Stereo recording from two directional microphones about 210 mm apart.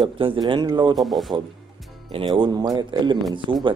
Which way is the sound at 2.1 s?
25° right (ahead or behind).